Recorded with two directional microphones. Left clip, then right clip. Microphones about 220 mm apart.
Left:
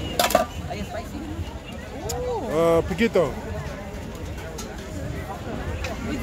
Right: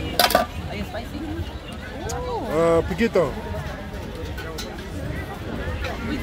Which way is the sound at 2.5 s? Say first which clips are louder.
Right 1 dB; 5° left (ahead or behind).